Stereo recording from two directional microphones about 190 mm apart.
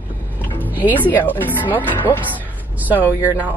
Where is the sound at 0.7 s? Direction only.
10° left (ahead or behind).